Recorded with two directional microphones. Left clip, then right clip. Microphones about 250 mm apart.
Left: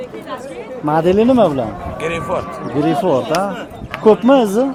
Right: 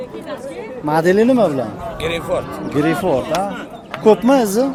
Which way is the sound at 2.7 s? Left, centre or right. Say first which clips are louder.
Left 2 dB; centre.